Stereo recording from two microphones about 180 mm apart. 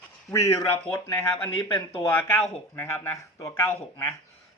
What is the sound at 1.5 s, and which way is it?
Speech, 30° left (ahead or behind).